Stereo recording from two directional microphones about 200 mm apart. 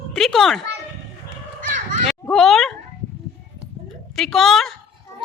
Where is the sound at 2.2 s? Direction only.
Centre (ahead or behind).